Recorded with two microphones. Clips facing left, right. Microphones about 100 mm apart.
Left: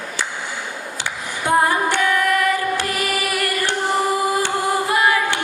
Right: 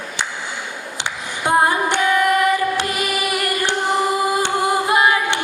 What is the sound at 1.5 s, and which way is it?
Female singing, 20° right (ahead or behind).